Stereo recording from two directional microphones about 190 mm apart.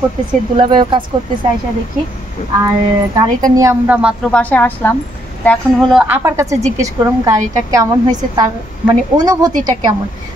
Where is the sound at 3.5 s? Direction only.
10° right (ahead or behind).